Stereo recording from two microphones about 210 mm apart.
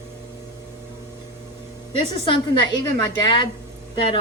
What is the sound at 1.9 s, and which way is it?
A woman's voice, 20° left (ahead or behind).